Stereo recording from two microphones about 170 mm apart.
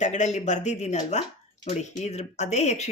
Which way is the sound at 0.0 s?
45° left (ahead or behind).